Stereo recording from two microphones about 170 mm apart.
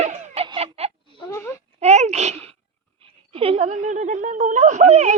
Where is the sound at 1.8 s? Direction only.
40° right (ahead or behind).